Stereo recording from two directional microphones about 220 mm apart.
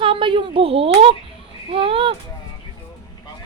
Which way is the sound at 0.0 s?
25° right (ahead or behind).